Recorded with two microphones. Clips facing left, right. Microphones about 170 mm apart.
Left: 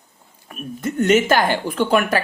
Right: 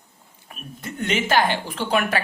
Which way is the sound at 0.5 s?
45° left (ahead or behind).